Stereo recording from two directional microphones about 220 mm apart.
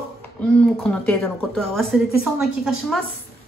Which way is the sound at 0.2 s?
5° left (ahead or behind).